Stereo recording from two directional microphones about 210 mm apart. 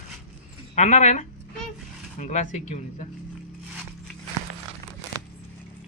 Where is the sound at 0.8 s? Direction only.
35° left (ahead or behind).